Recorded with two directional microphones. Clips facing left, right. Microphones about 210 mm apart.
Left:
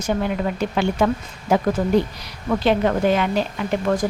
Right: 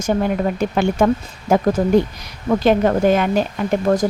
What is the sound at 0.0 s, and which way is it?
A woman's voice, 45° right (ahead or behind).